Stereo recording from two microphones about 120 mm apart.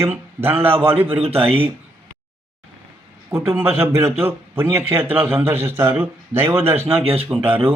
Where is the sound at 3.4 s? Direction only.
20° right (ahead or behind).